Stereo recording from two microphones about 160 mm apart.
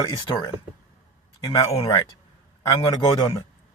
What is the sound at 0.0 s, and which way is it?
Speech, 25° left (ahead or behind).